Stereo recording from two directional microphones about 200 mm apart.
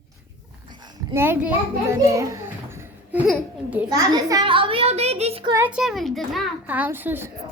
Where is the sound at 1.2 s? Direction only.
10° right (ahead or behind); by 5.5 s 30° right (ahead or behind).